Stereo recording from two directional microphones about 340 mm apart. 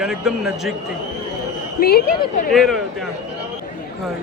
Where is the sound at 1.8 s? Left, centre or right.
Left.